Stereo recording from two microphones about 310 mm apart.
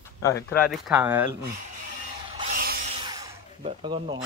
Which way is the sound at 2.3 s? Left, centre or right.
Centre.